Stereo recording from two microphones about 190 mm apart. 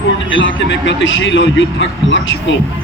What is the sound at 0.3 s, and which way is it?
A man's voice, 75° left (ahead or behind).